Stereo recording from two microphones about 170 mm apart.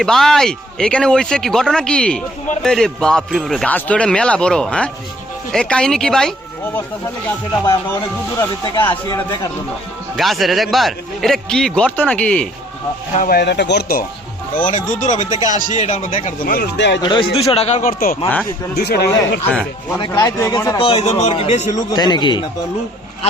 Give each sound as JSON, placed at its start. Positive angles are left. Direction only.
{"t": 0.0, "sound": "speech", "side_deg": 0}
{"t": 8.4, "sound": "speech", "side_deg": 25}
{"t": 10.2, "sound": "speech", "side_deg": 0}
{"t": 13.2, "sound": "speech", "side_deg": 70}
{"t": 14.5, "sound": "speech", "side_deg": 50}
{"t": 16.4, "sound": "speech", "side_deg": 60}
{"t": 17.0, "sound": "a man's voice", "side_deg": 30}
{"t": 17.8, "sound": "speech", "side_deg": 60}
{"t": 20.1, "sound": "speech", "side_deg": 20}
{"t": 20.7, "sound": "a man's voice", "side_deg": 35}
{"t": 21.8, "sound": "speech", "side_deg": 25}